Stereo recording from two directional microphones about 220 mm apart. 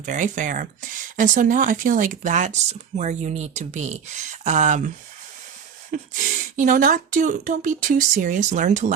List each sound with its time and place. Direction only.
0.0 s speech: 35° right (ahead or behind)
5.9 s speech: 35° right (ahead or behind)